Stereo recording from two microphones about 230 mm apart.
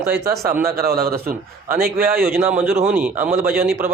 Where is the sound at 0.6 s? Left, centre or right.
Right.